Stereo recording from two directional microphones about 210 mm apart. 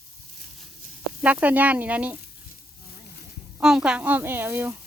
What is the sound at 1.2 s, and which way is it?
Speech, 5° right (ahead or behind).